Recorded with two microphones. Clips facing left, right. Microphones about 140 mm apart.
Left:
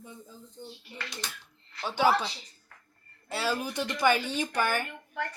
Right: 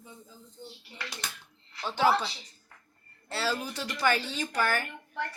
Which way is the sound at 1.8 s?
15° left (ahead or behind).